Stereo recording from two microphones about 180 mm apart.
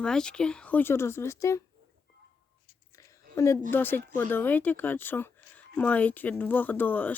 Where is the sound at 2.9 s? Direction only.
15° left (ahead or behind).